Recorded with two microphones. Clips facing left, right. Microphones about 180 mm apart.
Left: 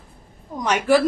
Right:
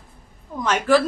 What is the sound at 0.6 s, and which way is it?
Speech, 15° left (ahead or behind).